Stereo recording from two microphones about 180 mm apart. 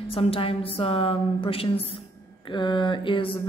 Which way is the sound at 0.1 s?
30° left (ahead or behind).